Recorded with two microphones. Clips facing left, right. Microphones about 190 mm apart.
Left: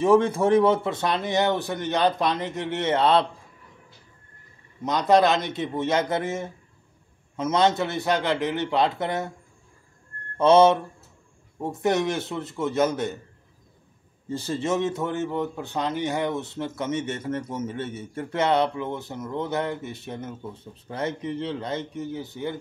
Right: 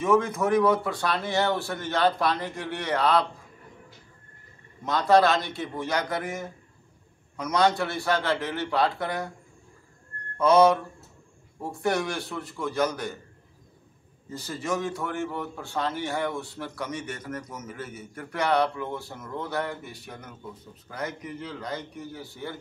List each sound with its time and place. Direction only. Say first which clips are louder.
0.0 s speech: left 4 dB; 30° left (ahead or behind)
4.8 s speech: left 1 dB; 20° left (ahead or behind)
10.3 s mantra: left 3 dB; 25° left (ahead or behind)
11.6 s speech: left 4 dB; 20° left (ahead or behind)
14.3 s speech: left 5 dB; 25° left (ahead or behind)